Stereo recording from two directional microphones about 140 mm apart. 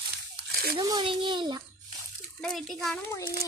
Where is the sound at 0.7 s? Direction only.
30° right (ahead or behind).